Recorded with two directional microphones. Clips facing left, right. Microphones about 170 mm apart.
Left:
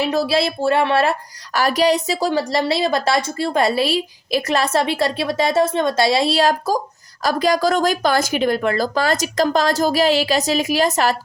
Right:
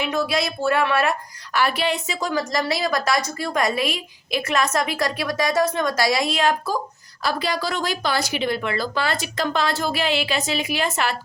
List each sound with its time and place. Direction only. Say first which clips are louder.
0.0 s a woman's voice: left 5 dB; 35° left (ahead or behind)
1.5 s a woman's voice: left 6 dB; 40° left (ahead or behind)